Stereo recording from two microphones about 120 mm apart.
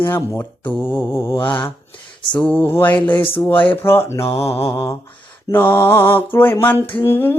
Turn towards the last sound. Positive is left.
turn(degrees=20)  # may be behind; listen again after turning